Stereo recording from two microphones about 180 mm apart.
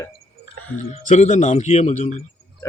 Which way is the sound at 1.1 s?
40° left (ahead or behind).